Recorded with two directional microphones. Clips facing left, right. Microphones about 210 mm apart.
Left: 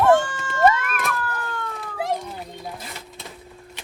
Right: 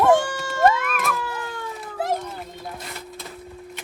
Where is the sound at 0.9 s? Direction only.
Centre (ahead or behind).